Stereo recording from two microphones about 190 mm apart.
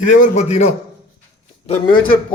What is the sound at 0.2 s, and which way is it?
A man's voice, 35° left (ahead or behind).